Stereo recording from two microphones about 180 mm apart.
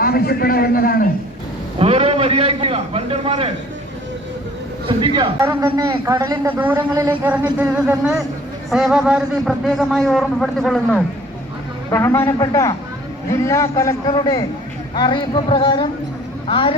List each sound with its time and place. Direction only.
0.0 s a man's voice: 60° left (ahead or behind)
1.8 s a man's voice: 35° right (ahead or behind)
4.9 s speech: 25° right (ahead or behind)
5.4 s a man's voice: 15° right (ahead or behind); by 11.0 s 5° left (ahead or behind)
11.9 s a man's voice: 15° left (ahead or behind)